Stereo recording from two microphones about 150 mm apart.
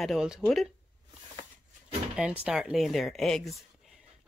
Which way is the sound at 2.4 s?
5° right (ahead or behind).